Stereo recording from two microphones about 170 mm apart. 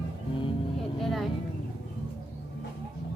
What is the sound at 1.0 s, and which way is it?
Speech, centre (ahead or behind).